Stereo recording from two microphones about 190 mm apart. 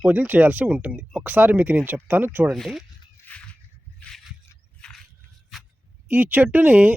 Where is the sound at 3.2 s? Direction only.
5° left (ahead or behind).